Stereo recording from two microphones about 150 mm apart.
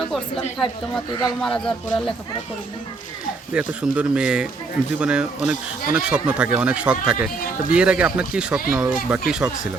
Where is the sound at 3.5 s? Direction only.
5° right (ahead or behind).